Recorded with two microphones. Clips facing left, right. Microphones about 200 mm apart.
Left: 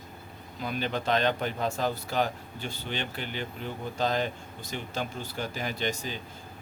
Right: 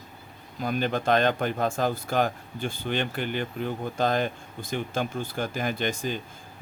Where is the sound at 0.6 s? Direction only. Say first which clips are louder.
Right 4 dB; 50° right (ahead or behind).